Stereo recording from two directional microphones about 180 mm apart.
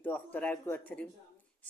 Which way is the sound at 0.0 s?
10° left (ahead or behind).